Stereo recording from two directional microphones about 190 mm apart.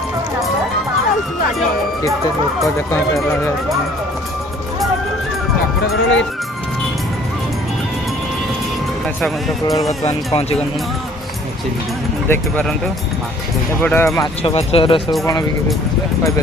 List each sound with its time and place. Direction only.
5.9 s speech: 90° left
10.1 s speech: 30° left (ahead or behind)
12.3 s speech: 5° left (ahead or behind)
13.8 s speech: 10° left (ahead or behind)
14.4 s speech: 30° left (ahead or behind)